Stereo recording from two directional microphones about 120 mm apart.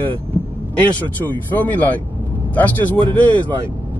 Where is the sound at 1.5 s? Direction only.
15° left (ahead or behind).